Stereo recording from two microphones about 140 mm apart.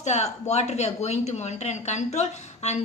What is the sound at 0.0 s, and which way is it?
Speech, 55° left (ahead or behind).